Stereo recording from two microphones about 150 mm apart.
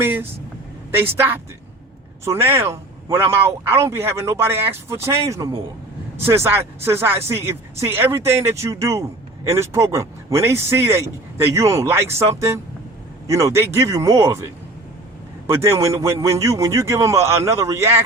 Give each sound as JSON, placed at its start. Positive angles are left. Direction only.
{"t": 0.0, "sound": "vehicle", "side_deg": -15}
{"t": 0.9, "sound": "a man's voice", "side_deg": -15}